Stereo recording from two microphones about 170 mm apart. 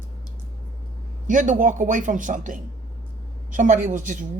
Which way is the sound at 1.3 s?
50° right (ahead or behind).